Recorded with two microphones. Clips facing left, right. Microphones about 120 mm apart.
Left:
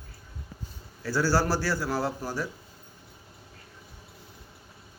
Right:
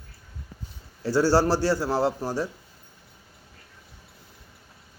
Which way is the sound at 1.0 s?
25° right (ahead or behind).